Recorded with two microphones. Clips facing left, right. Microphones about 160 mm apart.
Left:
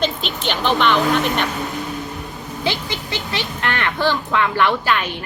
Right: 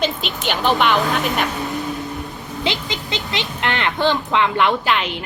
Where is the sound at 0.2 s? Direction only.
45° right (ahead or behind).